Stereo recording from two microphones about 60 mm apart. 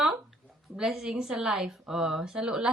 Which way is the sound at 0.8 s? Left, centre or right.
Centre.